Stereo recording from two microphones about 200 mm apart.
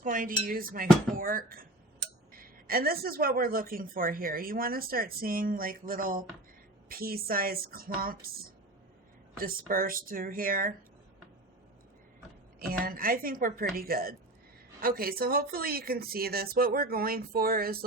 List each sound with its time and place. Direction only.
0.0 s speech: 40° right (ahead or behind)
9.4 s speech: 45° right (ahead or behind)
12.8 s speech: 45° right (ahead or behind)